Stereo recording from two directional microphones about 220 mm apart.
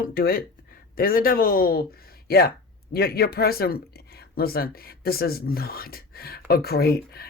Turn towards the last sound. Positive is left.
turn(degrees=45)  # may be behind; listen again after turning